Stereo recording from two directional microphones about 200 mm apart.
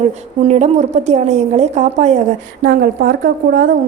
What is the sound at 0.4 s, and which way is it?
A woman's voice, 35° right (ahead or behind).